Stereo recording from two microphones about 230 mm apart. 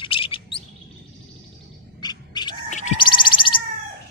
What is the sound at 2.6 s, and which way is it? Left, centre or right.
Bird, left.